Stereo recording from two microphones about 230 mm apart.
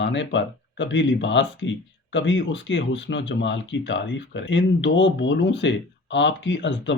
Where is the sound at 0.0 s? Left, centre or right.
Left.